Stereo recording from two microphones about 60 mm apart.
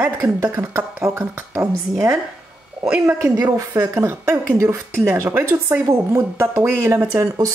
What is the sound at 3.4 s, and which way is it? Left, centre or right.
Speech, right.